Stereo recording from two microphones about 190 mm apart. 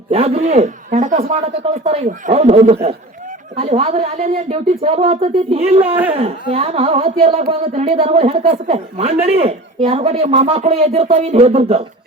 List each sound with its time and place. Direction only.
0.1 s speech: 30° right (ahead or behind)